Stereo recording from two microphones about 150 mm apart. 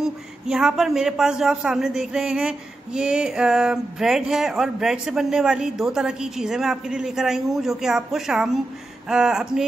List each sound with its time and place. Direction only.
0.0 s a man's voice: 5° right (ahead or behind)